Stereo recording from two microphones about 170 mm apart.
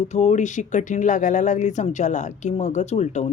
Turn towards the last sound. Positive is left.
turn(degrees=40)  # may be behind; listen again after turning